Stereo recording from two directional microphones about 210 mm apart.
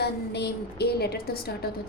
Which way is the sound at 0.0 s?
50° left (ahead or behind).